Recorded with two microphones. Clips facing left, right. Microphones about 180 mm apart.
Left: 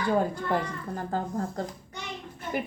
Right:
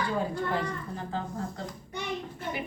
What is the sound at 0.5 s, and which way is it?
A woman's voice, 45° left (ahead or behind).